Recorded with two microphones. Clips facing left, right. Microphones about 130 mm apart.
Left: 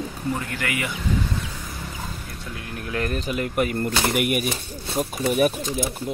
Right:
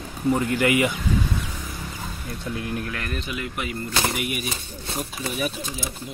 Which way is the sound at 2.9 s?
35° left (ahead or behind).